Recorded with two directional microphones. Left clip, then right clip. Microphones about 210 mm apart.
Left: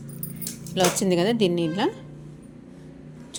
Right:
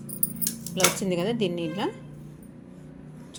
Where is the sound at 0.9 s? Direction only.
20° left (ahead or behind).